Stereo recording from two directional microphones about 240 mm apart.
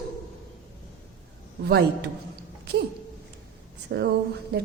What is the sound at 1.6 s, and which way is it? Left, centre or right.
Speech, right.